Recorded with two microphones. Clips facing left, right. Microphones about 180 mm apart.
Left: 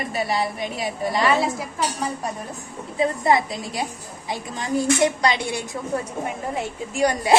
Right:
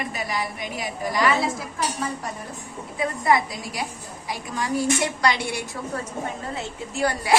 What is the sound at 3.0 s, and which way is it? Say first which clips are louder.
Speech: left 2 dB; 25° left (ahead or behind).